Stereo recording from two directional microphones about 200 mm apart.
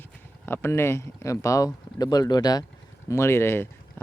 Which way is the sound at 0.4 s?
10° left (ahead or behind).